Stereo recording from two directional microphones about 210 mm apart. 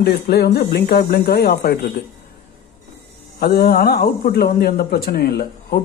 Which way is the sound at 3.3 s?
45° left (ahead or behind).